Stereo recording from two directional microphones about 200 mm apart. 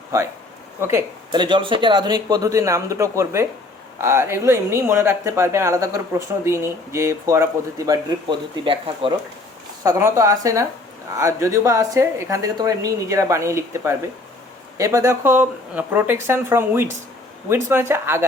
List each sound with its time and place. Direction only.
0.8 s speech: 15° right (ahead or behind)
9.8 s speech: 15° right (ahead or behind)